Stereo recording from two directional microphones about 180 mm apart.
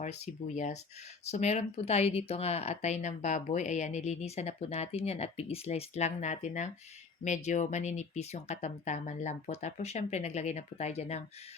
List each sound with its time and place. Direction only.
0.0 s speech: 40° left (ahead or behind)